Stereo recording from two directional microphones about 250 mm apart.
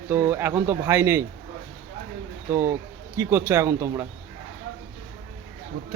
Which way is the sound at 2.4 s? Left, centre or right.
Centre.